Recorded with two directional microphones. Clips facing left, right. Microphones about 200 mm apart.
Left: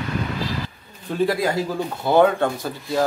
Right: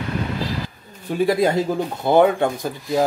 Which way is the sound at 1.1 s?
10° right (ahead or behind).